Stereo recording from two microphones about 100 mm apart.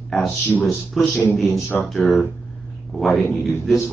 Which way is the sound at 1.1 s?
15° left (ahead or behind).